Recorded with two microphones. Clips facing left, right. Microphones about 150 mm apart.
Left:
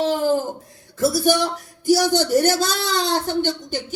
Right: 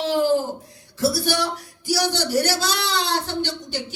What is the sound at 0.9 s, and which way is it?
Speech, 50° left (ahead or behind).